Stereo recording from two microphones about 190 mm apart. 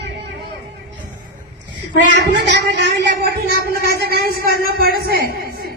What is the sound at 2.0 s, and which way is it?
Speech, 65° right (ahead or behind).